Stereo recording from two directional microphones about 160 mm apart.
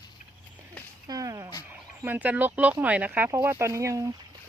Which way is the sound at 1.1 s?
20° right (ahead or behind).